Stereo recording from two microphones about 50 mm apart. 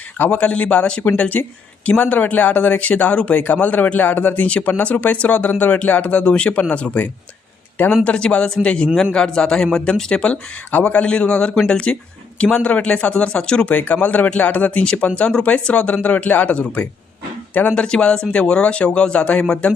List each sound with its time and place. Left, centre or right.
0.3 s speech: left
3.4 s a man's voice: left; by 10.3 s centre
10.7 s speech: left
13.7 s a man's voice: left
17.7 s speech: centre